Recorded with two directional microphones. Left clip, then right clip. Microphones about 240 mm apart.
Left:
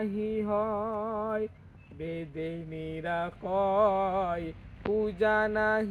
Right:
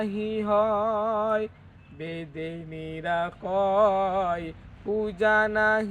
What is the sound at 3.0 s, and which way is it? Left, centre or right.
Mantra, right.